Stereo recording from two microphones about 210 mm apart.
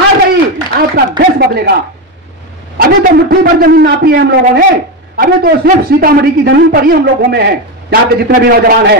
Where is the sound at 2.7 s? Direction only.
45° right (ahead or behind).